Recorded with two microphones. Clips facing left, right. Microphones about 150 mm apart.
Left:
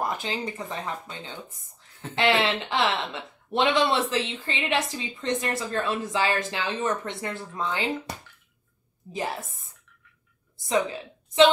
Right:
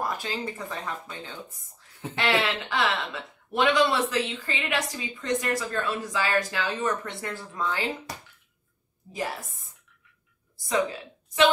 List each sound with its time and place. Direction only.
0.0 s speech: 20° left (ahead or behind)
2.1 s speech: 25° left (ahead or behind)
9.1 s speech: 25° left (ahead or behind)
10.7 s a woman's voice: 25° left (ahead or behind)